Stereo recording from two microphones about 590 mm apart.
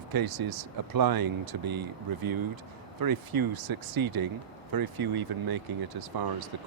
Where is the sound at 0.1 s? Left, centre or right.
Right.